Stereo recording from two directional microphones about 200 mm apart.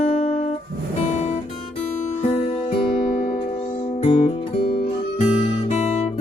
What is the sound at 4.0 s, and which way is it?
Guitar, 30° left (ahead or behind).